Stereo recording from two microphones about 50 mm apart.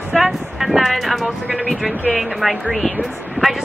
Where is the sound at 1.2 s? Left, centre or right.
Centre.